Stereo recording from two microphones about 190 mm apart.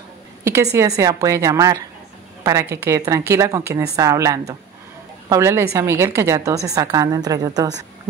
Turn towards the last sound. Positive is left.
turn(degrees=-20)  # may be behind; listen again after turning